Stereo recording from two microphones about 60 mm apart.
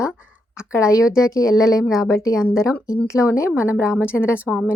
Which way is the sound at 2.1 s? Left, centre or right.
Left.